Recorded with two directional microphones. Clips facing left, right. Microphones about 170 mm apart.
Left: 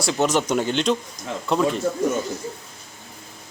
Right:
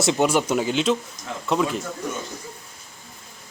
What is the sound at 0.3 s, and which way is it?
A man's voice, 5° right (ahead or behind).